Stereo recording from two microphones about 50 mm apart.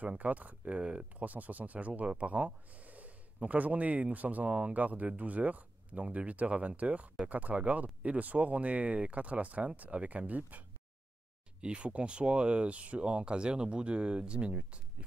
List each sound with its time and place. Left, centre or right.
0.1 s speech: right
11.6 s speech: right